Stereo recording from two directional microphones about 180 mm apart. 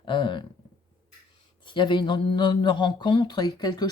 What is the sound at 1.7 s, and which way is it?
Speech, 25° left (ahead or behind).